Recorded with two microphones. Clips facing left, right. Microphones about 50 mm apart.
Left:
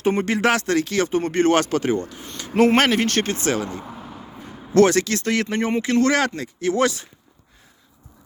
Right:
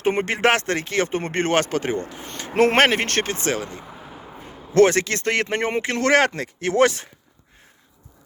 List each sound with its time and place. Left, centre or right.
0.0 s speech: right
1.5 s speech: right
2.3 s a sound: right
2.7 s speech: right
3.2 s speech: centre
3.7 s vehicle: centre
4.7 s speech: right
5.5 s a man's voice: right